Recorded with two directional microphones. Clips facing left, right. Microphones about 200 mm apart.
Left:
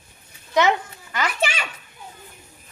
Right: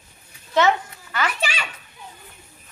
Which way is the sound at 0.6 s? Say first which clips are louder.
Right 1 dB; 15° left (ahead or behind).